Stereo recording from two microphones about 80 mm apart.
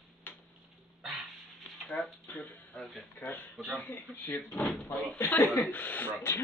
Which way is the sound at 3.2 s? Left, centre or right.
Left.